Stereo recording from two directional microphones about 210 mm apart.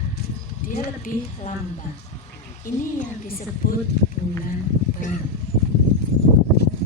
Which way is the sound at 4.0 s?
55° left (ahead or behind).